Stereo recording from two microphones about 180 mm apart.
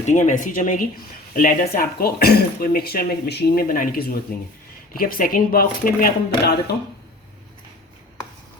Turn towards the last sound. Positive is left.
turn(degrees=60)  # may be behind; listen again after turning